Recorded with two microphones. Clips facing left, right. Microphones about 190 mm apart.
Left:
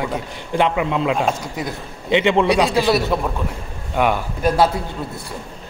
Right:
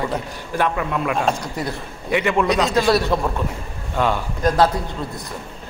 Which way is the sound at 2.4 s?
10° left (ahead or behind).